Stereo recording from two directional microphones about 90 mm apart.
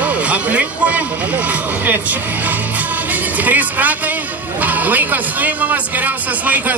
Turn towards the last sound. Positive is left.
turn(degrees=-20)  # may be behind; listen again after turning